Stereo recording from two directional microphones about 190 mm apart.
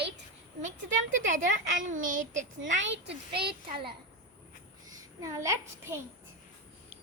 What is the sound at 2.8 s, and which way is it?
Speech, 75° right (ahead or behind).